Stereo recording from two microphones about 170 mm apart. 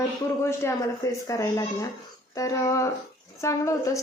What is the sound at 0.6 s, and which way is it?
Speech, 20° left (ahead or behind).